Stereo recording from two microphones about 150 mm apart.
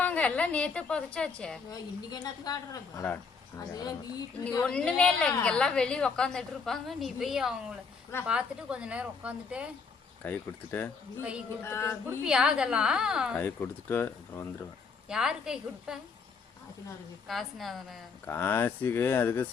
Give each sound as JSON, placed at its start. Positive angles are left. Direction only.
{"t": 0.0, "sound": "a woman's voice", "side_deg": 10}
{"t": 2.0, "sound": "speech", "side_deg": 25}
{"t": 4.6, "sound": "a woman's voice", "side_deg": 5}
{"t": 10.2, "sound": "a woman's voice", "side_deg": 15}
{"t": 11.2, "sound": "a woman's voice", "side_deg": -5}
{"t": 11.6, "sound": "a woman's voice", "side_deg": 15}
{"t": 12.2, "sound": "a woman's voice", "side_deg": -5}
{"t": 13.4, "sound": "a woman's voice", "side_deg": 15}
{"t": 15.1, "sound": "a woman's voice", "side_deg": -5}
{"t": 17.2, "sound": "a woman's voice", "side_deg": 0}
{"t": 18.3, "sound": "a woman's voice", "side_deg": 15}